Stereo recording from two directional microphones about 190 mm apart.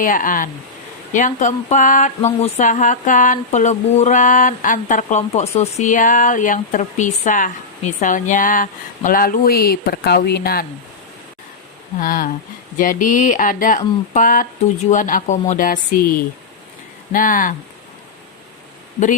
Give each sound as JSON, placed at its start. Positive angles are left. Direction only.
{"t": 0.0, "sound": "speech", "side_deg": 45}
{"t": 11.9, "sound": "speech", "side_deg": 45}
{"t": 17.1, "sound": "speech", "side_deg": 45}